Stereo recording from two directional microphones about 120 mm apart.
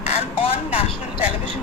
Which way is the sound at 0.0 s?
65° left (ahead or behind).